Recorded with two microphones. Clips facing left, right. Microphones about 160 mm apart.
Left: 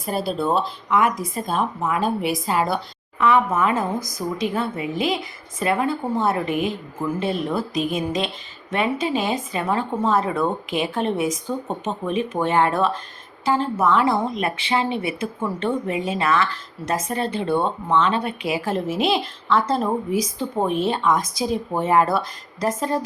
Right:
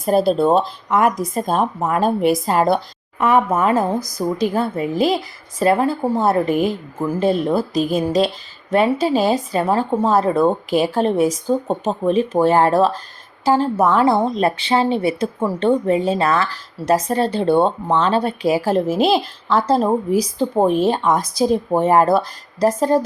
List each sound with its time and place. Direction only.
0.0 s speech: 45° right (ahead or behind)